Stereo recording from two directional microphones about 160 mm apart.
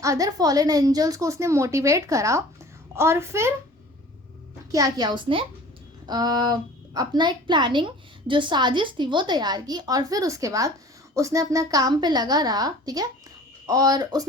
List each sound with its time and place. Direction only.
0.0 s a woman's voice: 20° right (ahead or behind)
4.7 s a woman's voice: 25° right (ahead or behind)